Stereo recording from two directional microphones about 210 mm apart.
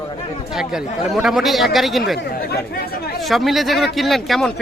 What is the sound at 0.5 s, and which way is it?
Speech, centre (ahead or behind).